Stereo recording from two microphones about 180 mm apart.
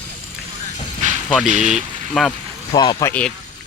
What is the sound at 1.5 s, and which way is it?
Speech, 40° right (ahead or behind).